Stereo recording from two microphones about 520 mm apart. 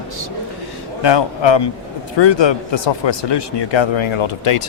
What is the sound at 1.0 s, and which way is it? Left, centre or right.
A man's voice, left.